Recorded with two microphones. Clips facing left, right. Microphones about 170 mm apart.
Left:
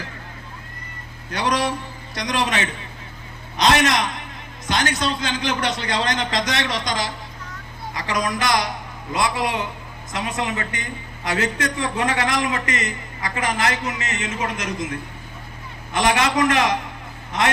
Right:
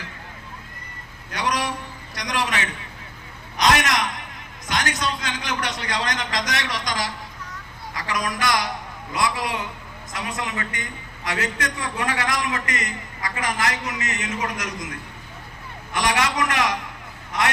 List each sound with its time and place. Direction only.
1.3 s a woman's voice: 30° left (ahead or behind)
3.6 s a sound: 25° left (ahead or behind)
4.7 s a woman's voice: 30° left (ahead or behind)